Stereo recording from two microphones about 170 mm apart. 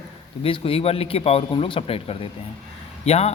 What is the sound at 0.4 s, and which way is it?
A man's voice, 35° left (ahead or behind).